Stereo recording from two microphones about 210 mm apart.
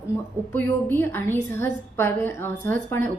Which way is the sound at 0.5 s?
10° left (ahead or behind).